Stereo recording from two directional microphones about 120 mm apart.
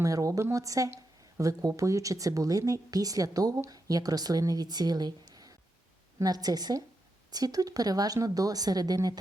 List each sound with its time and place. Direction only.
0.0 s a woman's voice: 30° right (ahead or behind)